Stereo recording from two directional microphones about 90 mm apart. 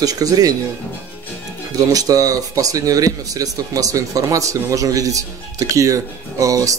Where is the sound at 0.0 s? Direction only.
45° right (ahead or behind).